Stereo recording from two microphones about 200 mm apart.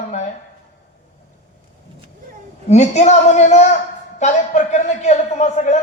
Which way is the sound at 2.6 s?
35° left (ahead or behind).